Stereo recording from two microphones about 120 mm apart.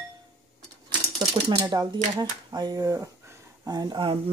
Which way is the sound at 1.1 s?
35° right (ahead or behind).